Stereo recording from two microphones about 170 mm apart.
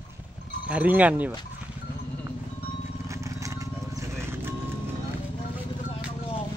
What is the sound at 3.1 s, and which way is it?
Horse, 20° right (ahead or behind).